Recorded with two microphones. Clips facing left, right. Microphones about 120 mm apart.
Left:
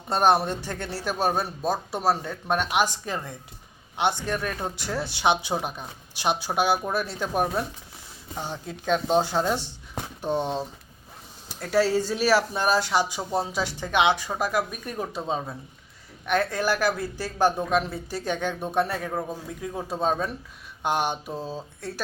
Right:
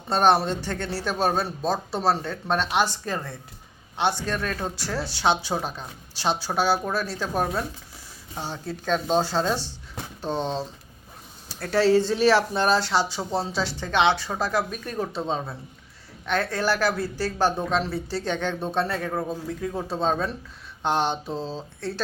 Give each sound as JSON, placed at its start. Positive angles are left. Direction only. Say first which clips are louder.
{"t": 0.1, "sound": "speech", "louder": "right 1 dB", "side_deg": 15}